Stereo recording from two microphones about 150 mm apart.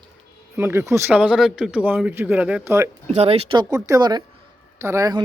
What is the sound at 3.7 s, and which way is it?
Speech, 25° right (ahead or behind).